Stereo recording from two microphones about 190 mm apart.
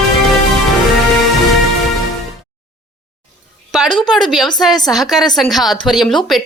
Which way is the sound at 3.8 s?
25° left (ahead or behind).